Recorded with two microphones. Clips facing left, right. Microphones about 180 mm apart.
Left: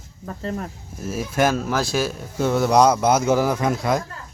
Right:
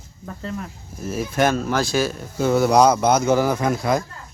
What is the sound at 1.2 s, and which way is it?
Speech, 5° left (ahead or behind).